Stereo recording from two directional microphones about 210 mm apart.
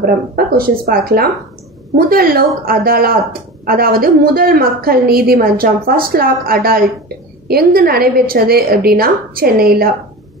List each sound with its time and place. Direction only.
0.6 s a woman's voice: 45° right (ahead or behind)